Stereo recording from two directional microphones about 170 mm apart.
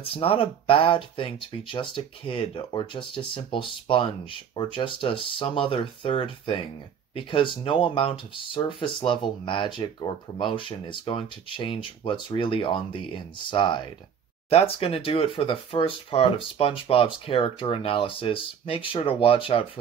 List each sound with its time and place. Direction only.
0.0 s speech: 35° left (ahead or behind)